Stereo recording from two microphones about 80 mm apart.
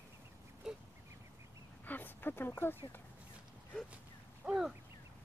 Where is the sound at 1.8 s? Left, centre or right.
Left.